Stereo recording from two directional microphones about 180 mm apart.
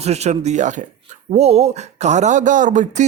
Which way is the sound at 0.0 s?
35° right (ahead or behind).